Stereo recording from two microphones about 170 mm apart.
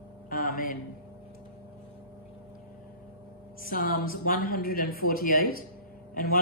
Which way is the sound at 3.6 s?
55° left (ahead or behind).